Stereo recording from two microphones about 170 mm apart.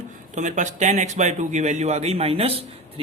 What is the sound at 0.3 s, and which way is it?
A man's voice, 45° right (ahead or behind).